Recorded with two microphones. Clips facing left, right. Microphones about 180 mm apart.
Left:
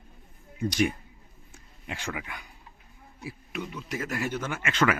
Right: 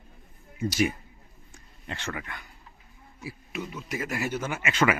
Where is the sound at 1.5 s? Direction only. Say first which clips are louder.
Even; 10° left (ahead or behind).